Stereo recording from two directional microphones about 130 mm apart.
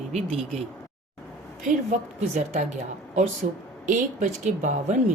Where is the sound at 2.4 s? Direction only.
65° right (ahead or behind).